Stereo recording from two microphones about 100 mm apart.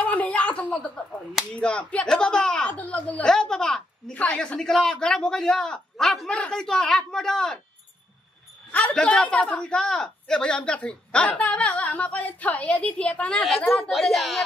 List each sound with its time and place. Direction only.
0.0 s a sound: 15° left (ahead or behind)
1.5 s a woman's voice: 10° left (ahead or behind)
8.7 s a woman's voice: 10° left (ahead or behind)